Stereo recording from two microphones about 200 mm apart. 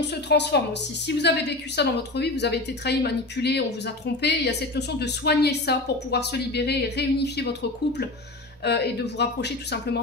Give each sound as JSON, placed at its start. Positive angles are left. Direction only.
{"t": 0.0, "sound": "a woman's voice", "side_deg": 60}